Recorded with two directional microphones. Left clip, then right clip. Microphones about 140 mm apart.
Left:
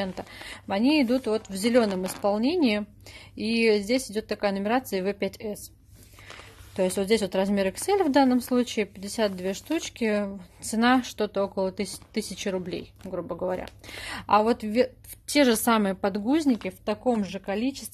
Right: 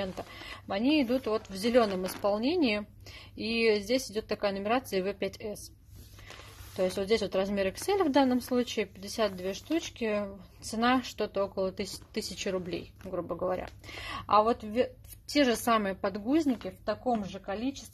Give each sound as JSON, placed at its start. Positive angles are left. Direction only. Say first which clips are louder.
{"t": 0.0, "sound": "speech", "louder": "left 4 dB", "side_deg": 30}
{"t": 6.8, "sound": "speech", "louder": "left 4 dB", "side_deg": 35}
{"t": 16.6, "sound": "a woman's voice", "louder": "left 5 dB", "side_deg": 65}